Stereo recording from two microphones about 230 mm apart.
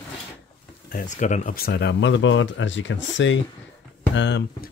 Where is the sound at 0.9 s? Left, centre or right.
Left.